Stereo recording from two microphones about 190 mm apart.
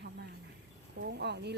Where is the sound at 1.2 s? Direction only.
60° right (ahead or behind).